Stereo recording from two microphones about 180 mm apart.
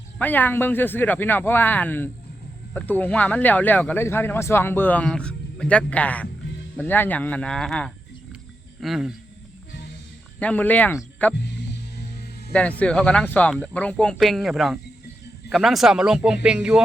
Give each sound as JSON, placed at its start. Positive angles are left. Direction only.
{"t": 0.2, "sound": "speech", "side_deg": 10}
{"t": 10.4, "sound": "speech", "side_deg": 10}
{"t": 11.9, "sound": "music", "side_deg": 60}
{"t": 12.5, "sound": "speech", "side_deg": 5}